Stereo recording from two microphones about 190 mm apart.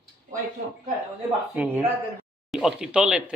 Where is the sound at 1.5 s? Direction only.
5° right (ahead or behind).